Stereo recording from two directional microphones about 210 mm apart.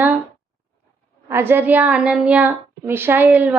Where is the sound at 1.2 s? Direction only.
10° right (ahead or behind).